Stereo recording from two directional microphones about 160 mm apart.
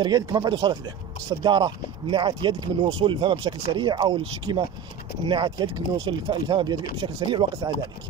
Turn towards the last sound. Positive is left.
turn(degrees=-30)  # may be behind; listen again after turning